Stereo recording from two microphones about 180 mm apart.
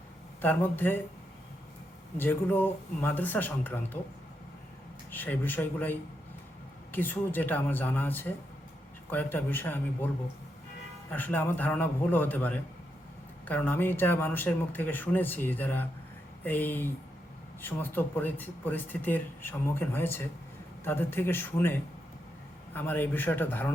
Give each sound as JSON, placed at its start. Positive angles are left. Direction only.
{"t": 0.4, "sound": "speech", "side_deg": 10}
{"t": 2.1, "sound": "speech", "side_deg": 10}
{"t": 5.1, "sound": "speech", "side_deg": 10}
{"t": 11.1, "sound": "speech", "side_deg": 10}